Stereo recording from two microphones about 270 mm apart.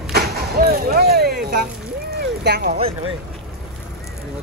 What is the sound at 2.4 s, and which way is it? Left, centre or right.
Speech, right.